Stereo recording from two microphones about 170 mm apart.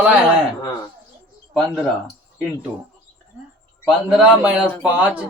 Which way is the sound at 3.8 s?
5° right (ahead or behind).